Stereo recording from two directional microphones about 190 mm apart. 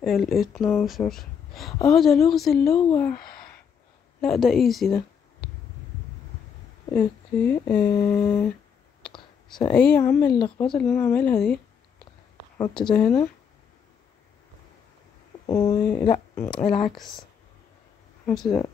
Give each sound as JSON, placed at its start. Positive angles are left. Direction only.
{"t": 0.0, "sound": "speech", "side_deg": 0}
{"t": 2.7, "sound": "speech", "side_deg": 15}
{"t": 4.2, "sound": "speech", "side_deg": 0}
{"t": 6.9, "sound": "speech", "side_deg": 10}
{"t": 9.1, "sound": "clicking", "side_deg": 25}
{"t": 9.7, "sound": "speech", "side_deg": 5}
{"t": 12.5, "sound": "speech", "side_deg": 20}
{"t": 12.9, "sound": "speech", "side_deg": 5}
{"t": 15.4, "sound": "speech", "side_deg": 15}
{"t": 18.2, "sound": "speech", "side_deg": 5}